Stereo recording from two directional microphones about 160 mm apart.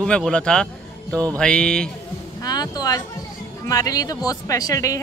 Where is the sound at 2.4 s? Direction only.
25° left (ahead or behind).